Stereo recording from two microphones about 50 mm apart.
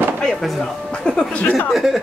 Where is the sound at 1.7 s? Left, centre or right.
Centre.